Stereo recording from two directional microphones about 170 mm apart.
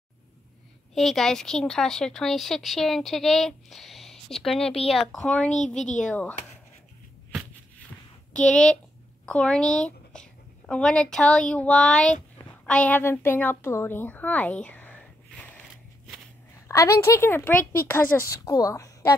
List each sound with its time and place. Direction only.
0.9 s speech: centre (ahead or behind)
8.3 s a woman's voice: 5° left (ahead or behind)
16.6 s speech: 15° left (ahead or behind)